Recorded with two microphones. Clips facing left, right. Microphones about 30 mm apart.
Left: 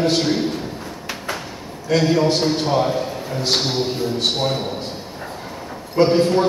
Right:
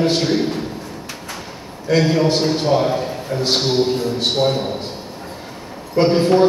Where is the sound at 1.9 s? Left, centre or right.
Centre.